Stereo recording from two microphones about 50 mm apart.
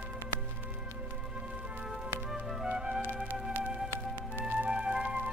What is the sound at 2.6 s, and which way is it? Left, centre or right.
Music, right.